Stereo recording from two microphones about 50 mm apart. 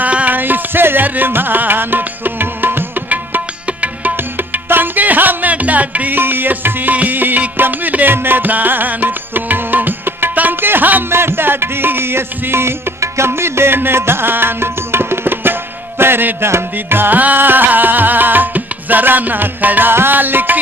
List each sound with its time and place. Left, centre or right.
0.0 s music: right
3.1 s music: right
6.1 s music: right
11.1 s music: right